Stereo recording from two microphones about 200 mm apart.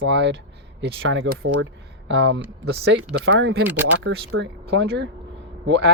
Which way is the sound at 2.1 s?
65° right (ahead or behind).